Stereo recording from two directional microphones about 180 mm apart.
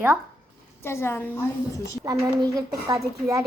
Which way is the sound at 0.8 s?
15° left (ahead or behind).